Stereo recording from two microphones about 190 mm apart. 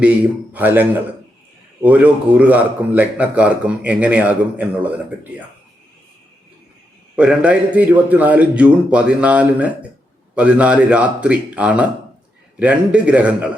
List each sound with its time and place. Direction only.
0.0 s a man's voice: 10° right (ahead or behind)
7.2 s a man's voice: 5° right (ahead or behind)